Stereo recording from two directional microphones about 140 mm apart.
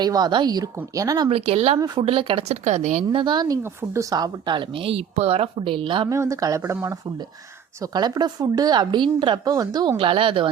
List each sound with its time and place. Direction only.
0.0 s a woman's voice: 30° right (ahead or behind)
1.3 s speech: 45° right (ahead or behind)
2.6 s speech: 60° right (ahead or behind)
3.1 s speech: 35° right (ahead or behind)
6.1 s a woman's voice: 25° right (ahead or behind)
10.0 s speech: 40° right (ahead or behind)